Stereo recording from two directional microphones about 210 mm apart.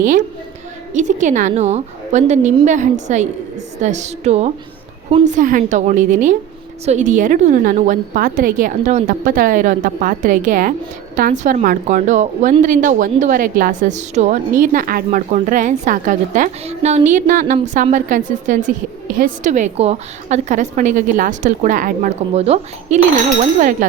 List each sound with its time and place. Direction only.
0.9 s a woman's voice: 35° right (ahead or behind)